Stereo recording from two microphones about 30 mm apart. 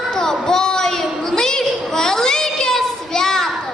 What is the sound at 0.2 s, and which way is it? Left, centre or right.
Child singing, centre.